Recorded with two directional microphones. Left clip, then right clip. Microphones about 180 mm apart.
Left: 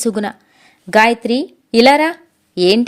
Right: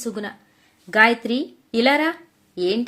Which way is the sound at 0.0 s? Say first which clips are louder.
Left 10 dB; 50° left (ahead or behind).